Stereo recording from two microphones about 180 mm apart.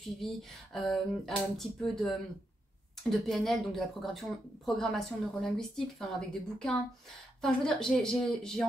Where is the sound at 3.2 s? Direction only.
Centre (ahead or behind).